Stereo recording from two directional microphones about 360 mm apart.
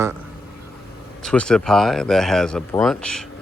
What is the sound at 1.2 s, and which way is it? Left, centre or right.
Speech, centre.